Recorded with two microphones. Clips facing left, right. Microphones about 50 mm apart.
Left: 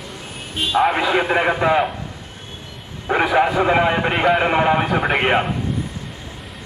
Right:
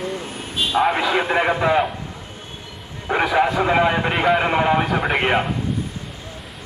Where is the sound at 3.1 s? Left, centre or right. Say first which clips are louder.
Left 2 dB; centre.